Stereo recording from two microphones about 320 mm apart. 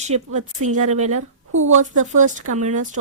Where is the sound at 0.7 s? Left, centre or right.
Right.